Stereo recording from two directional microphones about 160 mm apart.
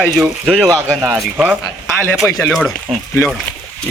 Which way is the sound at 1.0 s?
15° right (ahead or behind).